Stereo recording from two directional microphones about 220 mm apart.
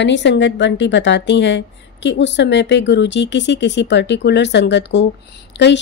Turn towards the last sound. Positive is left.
turn(degrees=55)  # may be behind; listen again after turning